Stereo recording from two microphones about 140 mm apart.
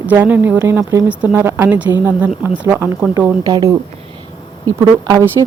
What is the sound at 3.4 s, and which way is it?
Speech, 30° right (ahead or behind).